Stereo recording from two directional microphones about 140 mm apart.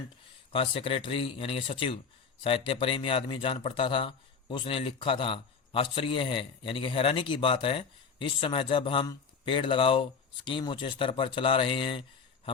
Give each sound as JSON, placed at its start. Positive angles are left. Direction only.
{"t": 0.5, "sound": "speech", "side_deg": 40}